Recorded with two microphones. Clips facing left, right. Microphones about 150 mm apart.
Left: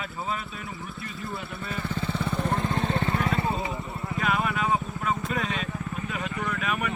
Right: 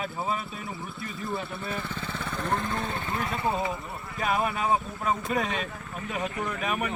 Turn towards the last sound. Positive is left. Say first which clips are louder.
# even
turn(degrees=-35)  # may be behind; listen again after turning